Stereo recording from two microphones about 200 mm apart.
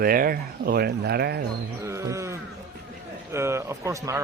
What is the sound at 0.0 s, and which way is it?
Speech, 45° right (ahead or behind).